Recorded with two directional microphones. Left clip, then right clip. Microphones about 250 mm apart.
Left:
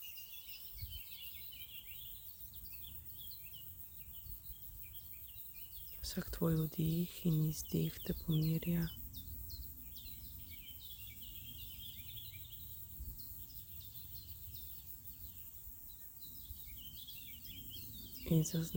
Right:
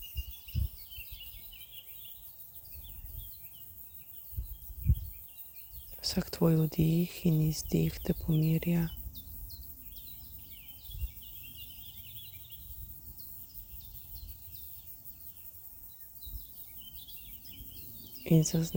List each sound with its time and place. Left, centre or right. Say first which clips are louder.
6.0 s speech: right 10 dB; right
18.3 s speech: right 9 dB; right